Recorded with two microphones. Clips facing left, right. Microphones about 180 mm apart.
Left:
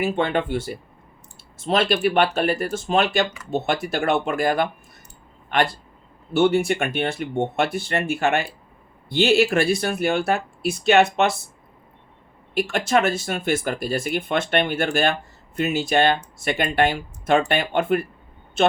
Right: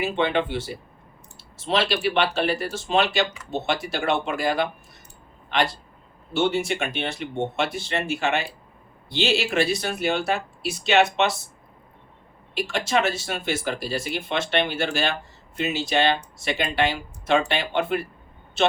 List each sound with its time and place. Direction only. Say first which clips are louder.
0.0 s speech: left 1 dB; 45° left (ahead or behind)
12.5 s speech: left 3 dB; 55° left (ahead or behind)